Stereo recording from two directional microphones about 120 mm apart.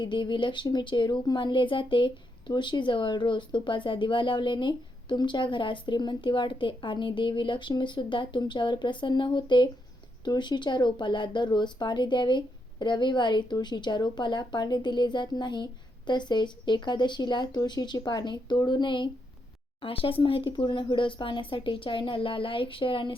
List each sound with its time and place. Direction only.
0.0 s speech: 40° left (ahead or behind)